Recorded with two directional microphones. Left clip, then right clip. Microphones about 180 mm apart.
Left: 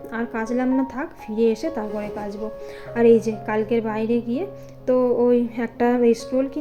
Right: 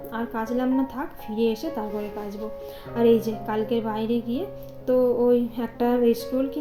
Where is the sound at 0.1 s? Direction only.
15° left (ahead or behind).